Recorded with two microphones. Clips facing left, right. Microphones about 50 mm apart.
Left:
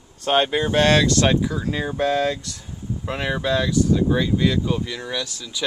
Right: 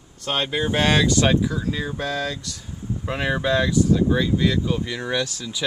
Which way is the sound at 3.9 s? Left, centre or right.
Centre.